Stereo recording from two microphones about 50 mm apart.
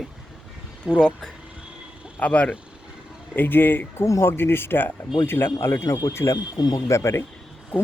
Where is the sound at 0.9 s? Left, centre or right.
Centre.